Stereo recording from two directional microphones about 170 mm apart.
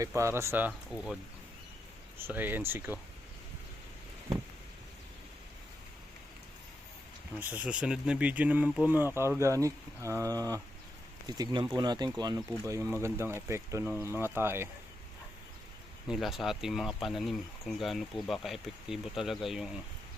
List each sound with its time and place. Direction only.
0.0 s speech: 15° right (ahead or behind)
2.1 s speech: 10° right (ahead or behind)
7.3 s speech: 10° right (ahead or behind)
16.0 s speech: centre (ahead or behind)